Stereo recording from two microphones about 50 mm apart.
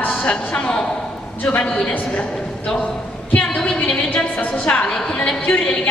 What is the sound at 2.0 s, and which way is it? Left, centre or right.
A man's voice, centre.